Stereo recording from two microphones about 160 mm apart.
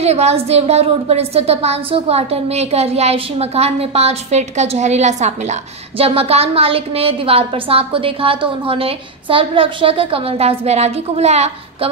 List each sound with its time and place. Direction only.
0.0 s a woman's voice: 40° right (ahead or behind)